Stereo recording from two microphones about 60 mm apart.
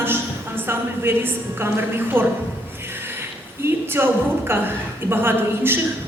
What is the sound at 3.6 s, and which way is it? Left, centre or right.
A woman's voice, right.